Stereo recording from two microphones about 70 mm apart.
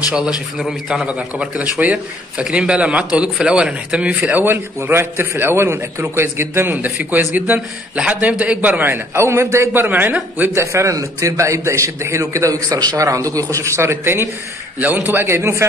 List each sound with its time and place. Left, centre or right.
0.6 s a man's voice: centre
1.0 s a man's voice: centre; by 9.7 s right
9.8 s a man's voice: right
10.5 s a man's voice: right
14.8 s a man's voice: right
15.1 s speech: right